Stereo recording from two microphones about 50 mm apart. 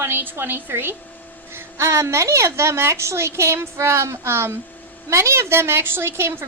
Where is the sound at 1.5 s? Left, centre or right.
Right.